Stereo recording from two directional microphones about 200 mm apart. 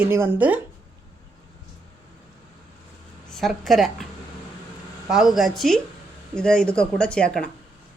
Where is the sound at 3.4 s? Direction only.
Centre (ahead or behind).